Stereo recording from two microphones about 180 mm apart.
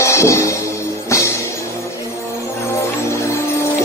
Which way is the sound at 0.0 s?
15° left (ahead or behind).